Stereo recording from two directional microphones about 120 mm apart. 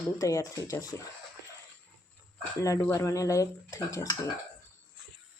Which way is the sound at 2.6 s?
25° left (ahead or behind).